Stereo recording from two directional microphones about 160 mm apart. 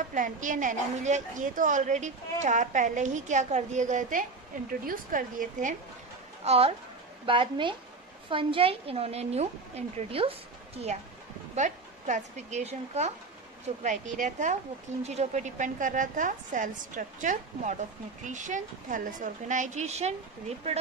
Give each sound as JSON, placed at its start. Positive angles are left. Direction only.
{"t": 0.1, "sound": "a woman's voice", "side_deg": -50}
{"t": 6.4, "sound": "a woman's voice", "side_deg": -40}
{"t": 11.5, "sound": "a woman's voice", "side_deg": -45}